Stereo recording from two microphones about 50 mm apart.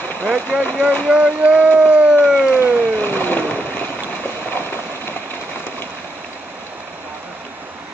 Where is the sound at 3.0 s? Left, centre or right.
Left.